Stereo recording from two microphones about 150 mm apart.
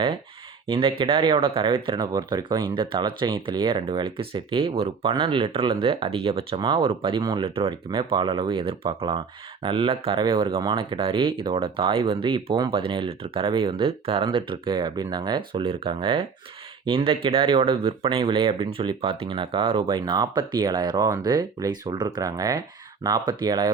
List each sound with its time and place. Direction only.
0.7 s speech: 35° right (ahead or behind)